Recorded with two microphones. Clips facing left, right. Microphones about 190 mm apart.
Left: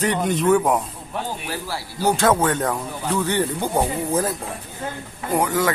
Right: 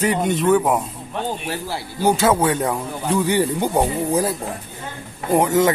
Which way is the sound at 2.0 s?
10° right (ahead or behind).